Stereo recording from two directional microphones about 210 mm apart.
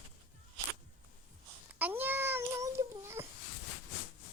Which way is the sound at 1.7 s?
10° right (ahead or behind).